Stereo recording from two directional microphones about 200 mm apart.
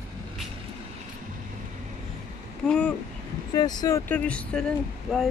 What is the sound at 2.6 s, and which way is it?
Speech, 5° left (ahead or behind).